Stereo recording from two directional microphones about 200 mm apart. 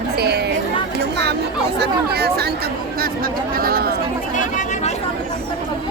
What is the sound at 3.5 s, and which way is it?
Speech, 50° right (ahead or behind).